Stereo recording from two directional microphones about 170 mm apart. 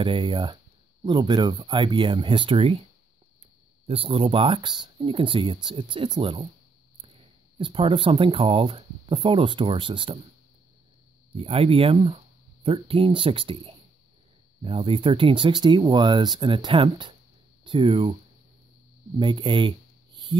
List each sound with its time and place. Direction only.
0.0 s speech: 30° right (ahead or behind)
3.8 s speech: 35° right (ahead or behind)
7.5 s speech: 30° right (ahead or behind)
11.3 s speech: 35° right (ahead or behind)
19.1 s speech: 30° right (ahead or behind)